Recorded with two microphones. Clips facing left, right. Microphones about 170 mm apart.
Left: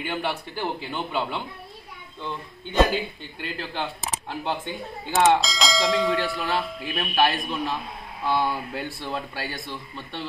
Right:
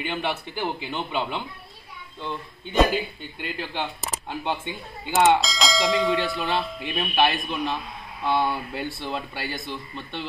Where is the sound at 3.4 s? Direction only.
10° right (ahead or behind).